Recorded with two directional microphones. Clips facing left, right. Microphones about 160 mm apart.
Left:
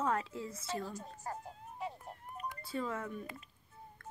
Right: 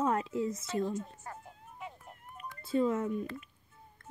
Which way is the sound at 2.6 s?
20° right (ahead or behind).